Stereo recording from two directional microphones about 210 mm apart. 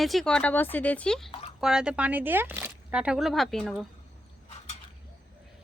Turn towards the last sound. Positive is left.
turn(degrees=0)  # may be behind; listen again after turning